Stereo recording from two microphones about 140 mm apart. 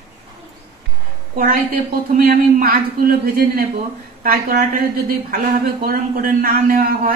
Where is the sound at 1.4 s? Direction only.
90° right.